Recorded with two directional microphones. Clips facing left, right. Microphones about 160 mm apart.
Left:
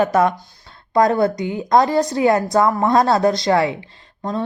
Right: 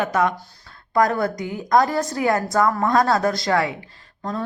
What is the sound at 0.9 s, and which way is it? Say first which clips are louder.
A woman's voice: left 4 dB; 25° left (ahead or behind).